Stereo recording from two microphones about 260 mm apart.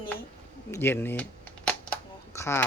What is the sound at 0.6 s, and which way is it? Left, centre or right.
Speech, centre.